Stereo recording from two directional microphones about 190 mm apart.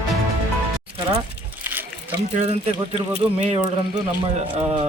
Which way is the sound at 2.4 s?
30° right (ahead or behind).